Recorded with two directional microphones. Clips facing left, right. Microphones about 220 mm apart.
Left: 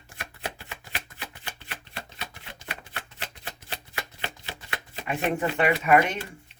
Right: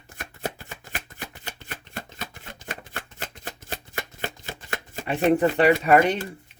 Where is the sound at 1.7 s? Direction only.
50° right (ahead or behind).